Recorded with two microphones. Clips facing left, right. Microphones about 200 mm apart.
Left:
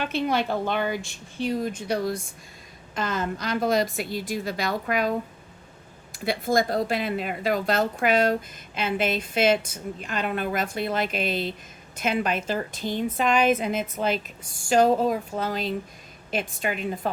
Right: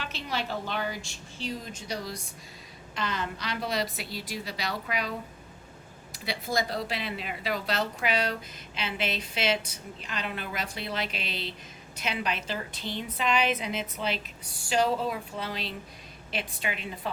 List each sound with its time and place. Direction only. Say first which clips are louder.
0.0 s a woman's voice: left 9 dB; 55° left (ahead or behind)
6.1 s speech: left 7 dB; 50° left (ahead or behind)